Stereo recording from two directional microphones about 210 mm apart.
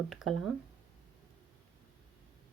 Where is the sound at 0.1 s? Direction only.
Centre (ahead or behind).